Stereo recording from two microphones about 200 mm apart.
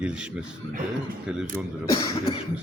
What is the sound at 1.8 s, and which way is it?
Speech, 20° left (ahead or behind).